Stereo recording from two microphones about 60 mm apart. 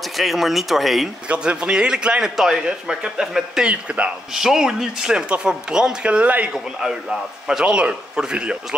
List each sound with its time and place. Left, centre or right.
0.2 s speech: centre
1.3 s speech: centre
4.3 s speech: centre
6.5 s speech: centre